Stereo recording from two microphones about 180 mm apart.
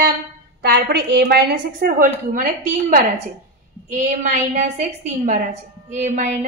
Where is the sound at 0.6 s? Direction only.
65° right (ahead or behind).